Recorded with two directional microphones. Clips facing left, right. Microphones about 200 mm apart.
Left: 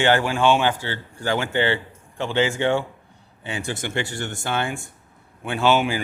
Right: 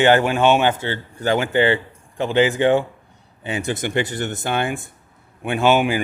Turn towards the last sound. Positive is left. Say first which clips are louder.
# right 3 dB
turn(degrees=-15)  # may be behind; listen again after turning